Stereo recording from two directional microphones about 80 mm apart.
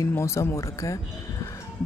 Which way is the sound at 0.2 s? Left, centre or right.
Left.